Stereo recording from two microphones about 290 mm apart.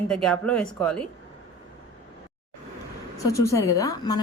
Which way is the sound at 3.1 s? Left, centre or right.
Centre.